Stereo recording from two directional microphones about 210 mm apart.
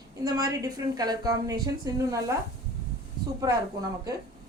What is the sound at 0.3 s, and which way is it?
A woman's voice, 15° right (ahead or behind).